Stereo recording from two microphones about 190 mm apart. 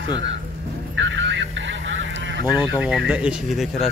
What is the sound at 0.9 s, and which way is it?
Honk, 75° right (ahead or behind).